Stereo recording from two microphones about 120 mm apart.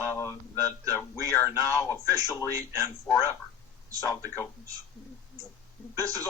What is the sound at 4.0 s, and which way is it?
Speech, 25° left (ahead or behind).